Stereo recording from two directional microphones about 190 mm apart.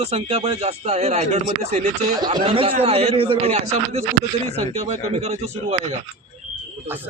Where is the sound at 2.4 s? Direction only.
30° right (ahead or behind).